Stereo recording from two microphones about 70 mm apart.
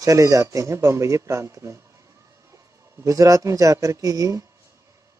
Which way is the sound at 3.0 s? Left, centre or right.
Right.